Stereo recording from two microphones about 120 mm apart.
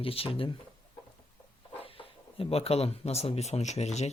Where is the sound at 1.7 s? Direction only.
50° left (ahead or behind).